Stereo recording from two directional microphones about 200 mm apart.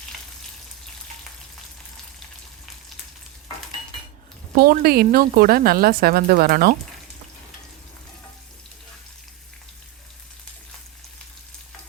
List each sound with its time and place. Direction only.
4.5 s a woman's voice: 45° right (ahead or behind)